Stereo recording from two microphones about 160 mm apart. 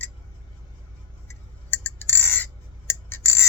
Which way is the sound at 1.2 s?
15° left (ahead or behind).